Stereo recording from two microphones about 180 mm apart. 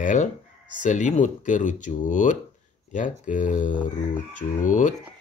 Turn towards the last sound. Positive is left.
turn(degrees=45)  # may be behind; listen again after turning